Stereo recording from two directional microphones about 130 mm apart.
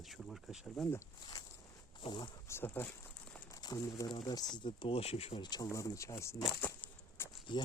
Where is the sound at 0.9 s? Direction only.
20° left (ahead or behind).